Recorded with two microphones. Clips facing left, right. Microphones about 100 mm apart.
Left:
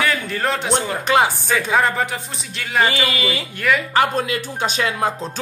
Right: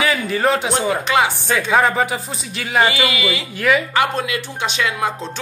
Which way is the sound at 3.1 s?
40° left (ahead or behind).